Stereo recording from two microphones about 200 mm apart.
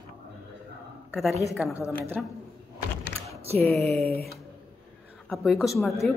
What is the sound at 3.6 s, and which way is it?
Speech, centre (ahead or behind).